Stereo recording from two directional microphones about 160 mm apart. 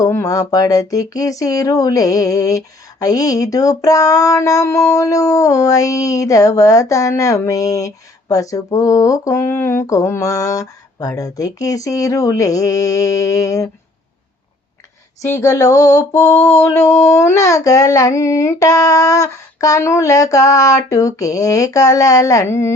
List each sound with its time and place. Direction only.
0.0 s speech: 20° left (ahead or behind)
15.4 s speech: 20° left (ahead or behind)